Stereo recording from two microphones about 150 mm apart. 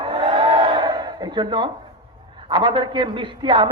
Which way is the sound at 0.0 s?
30° right (ahead or behind).